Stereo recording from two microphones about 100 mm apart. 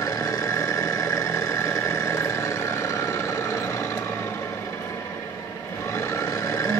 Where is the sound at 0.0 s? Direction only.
35° left (ahead or behind).